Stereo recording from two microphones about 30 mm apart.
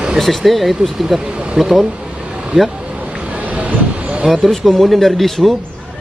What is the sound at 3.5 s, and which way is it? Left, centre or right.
Vehicle, right.